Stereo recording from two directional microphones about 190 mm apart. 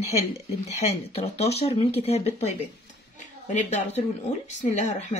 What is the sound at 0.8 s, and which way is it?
Speech, 35° left (ahead or behind).